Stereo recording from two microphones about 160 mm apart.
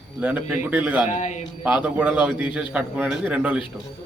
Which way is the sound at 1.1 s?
50° left (ahead or behind).